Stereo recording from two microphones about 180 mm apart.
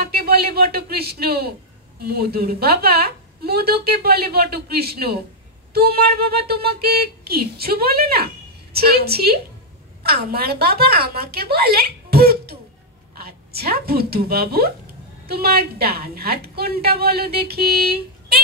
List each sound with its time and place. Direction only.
0.0 s a woman's voice: 60° right (ahead or behind)